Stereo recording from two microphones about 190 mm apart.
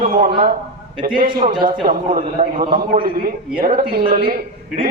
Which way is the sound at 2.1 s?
45° right (ahead or behind).